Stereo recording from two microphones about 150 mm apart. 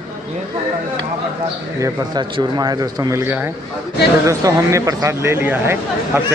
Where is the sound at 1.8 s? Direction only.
25° right (ahead or behind).